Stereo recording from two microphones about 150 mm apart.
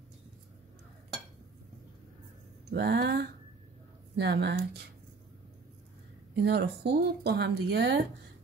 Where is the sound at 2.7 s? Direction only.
90° right.